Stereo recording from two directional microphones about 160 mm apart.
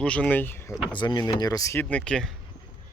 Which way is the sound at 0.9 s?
30° left (ahead or behind).